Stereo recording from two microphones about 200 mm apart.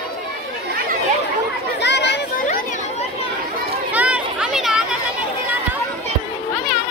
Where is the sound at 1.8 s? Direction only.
60° left (ahead or behind).